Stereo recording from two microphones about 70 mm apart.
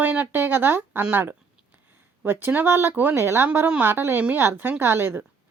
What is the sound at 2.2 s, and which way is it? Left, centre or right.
A woman's voice, right.